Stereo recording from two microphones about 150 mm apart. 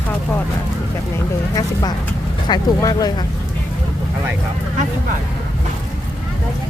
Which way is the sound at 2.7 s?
25° left (ahead or behind).